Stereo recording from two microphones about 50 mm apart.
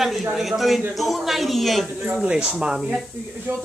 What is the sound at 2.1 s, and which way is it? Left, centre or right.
Speech, centre.